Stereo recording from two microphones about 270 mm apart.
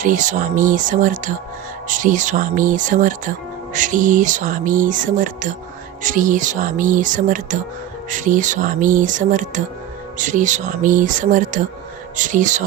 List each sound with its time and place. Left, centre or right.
0.0 s speech: right